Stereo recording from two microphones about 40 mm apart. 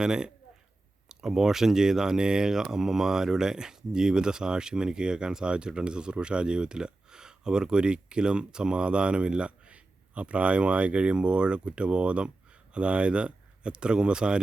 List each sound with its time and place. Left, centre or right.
0.0 s speech: centre